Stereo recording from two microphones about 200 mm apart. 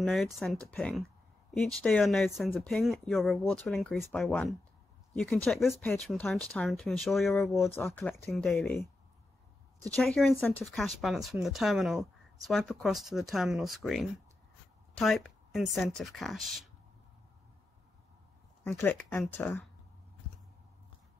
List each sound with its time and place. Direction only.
0.0 s speech: centre (ahead or behind)
7.5 s speech: 10° left (ahead or behind)
9.9 s a woman's voice: centre (ahead or behind)
18.6 s speech: 10° left (ahead or behind)